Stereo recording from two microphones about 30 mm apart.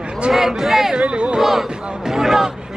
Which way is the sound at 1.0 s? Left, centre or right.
Right.